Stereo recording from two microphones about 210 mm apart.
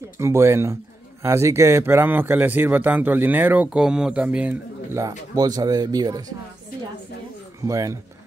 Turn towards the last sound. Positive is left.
turn(degrees=-15)  # may be behind; listen again after turning